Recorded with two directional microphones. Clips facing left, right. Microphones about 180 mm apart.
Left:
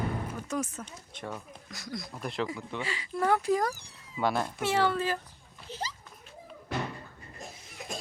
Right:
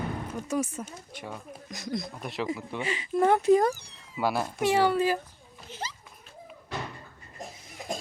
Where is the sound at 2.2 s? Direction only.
5° right (ahead or behind).